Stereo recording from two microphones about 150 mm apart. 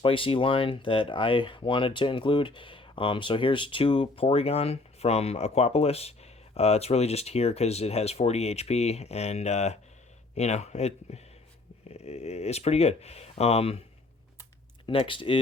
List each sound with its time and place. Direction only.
0.0 s speech: 35° left (ahead or behind)
14.8 s speech: 35° left (ahead or behind)